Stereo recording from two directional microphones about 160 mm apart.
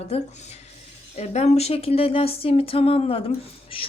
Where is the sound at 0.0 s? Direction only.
40° left (ahead or behind).